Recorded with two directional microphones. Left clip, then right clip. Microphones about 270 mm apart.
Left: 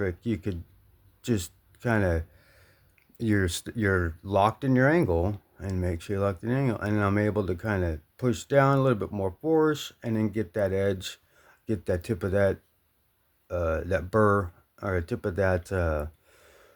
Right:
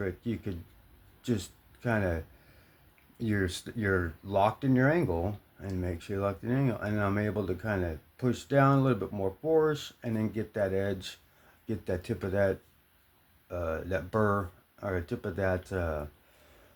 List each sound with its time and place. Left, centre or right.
0.0 s speech: left